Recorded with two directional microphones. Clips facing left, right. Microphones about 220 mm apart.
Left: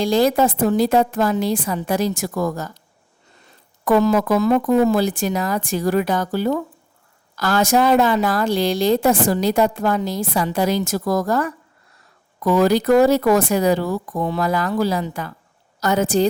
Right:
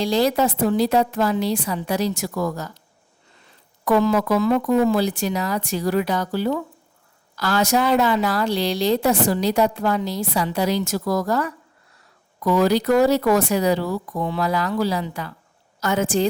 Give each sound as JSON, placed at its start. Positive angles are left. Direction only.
{"t": 0.0, "sound": "a woman's voice", "side_deg": 50}
{"t": 3.8, "sound": "a woman's voice", "side_deg": 45}